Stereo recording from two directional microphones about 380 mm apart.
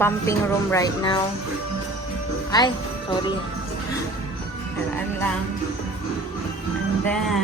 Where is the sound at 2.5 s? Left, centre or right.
Centre.